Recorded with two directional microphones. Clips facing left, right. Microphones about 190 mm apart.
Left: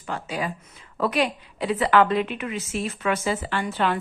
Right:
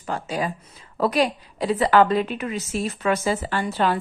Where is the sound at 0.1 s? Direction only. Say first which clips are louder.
Right 3 dB; 40° right (ahead or behind).